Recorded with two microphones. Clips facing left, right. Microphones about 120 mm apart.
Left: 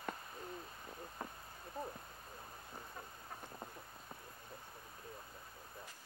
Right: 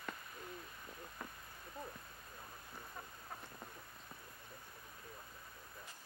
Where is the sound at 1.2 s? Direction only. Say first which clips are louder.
Left 3 dB; 35° left (ahead or behind).